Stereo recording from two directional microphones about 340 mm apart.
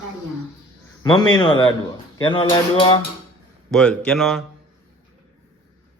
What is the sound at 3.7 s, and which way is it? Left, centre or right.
Speech, centre.